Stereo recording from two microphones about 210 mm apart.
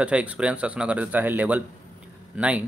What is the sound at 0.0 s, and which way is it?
A man's voice, 5° right (ahead or behind).